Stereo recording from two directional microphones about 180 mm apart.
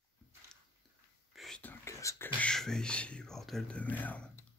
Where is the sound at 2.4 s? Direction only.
5° left (ahead or behind).